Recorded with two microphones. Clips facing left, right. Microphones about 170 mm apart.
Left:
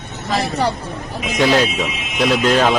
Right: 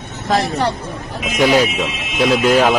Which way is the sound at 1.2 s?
10° right (ahead or behind).